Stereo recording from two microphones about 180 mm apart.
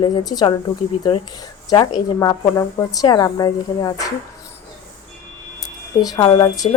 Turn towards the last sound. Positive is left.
turn(degrees=20)  # may be behind; listen again after turning